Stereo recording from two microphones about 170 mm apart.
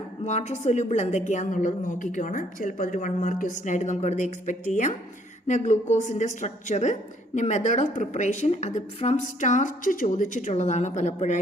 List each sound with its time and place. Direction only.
0.3 s a woman's voice: 40° left (ahead or behind)